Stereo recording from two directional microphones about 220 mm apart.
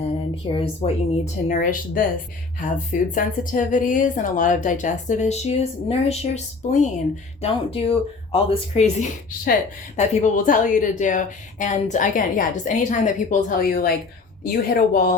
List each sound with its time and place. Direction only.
0.4 s a woman's voice: 25° left (ahead or behind); by 15.1 s 40° left (ahead or behind)